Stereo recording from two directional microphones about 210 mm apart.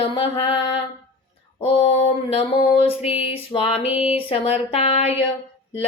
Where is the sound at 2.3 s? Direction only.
25° left (ahead or behind).